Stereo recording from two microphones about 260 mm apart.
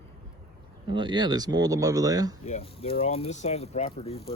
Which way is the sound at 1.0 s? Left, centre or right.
Centre.